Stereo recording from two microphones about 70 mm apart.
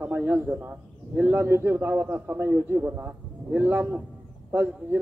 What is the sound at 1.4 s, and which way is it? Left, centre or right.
A man's voice, right.